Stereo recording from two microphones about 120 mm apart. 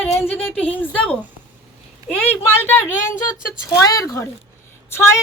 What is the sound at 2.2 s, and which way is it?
Speech, 15° left (ahead or behind).